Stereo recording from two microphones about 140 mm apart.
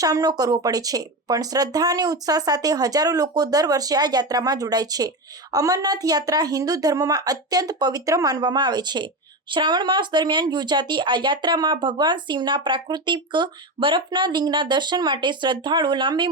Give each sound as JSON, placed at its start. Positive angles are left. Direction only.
{"t": 0.0, "sound": "speech", "side_deg": -25}